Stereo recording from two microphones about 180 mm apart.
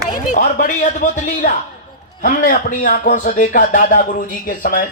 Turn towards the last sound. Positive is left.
turn(degrees=50)  # may be behind; listen again after turning